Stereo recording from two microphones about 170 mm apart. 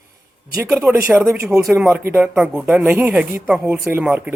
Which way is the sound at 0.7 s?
10° right (ahead or behind).